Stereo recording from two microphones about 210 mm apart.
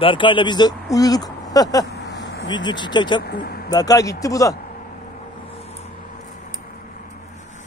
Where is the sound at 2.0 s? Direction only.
55° left (ahead or behind).